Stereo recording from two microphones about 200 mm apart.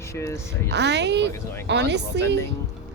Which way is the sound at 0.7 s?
60° right (ahead or behind).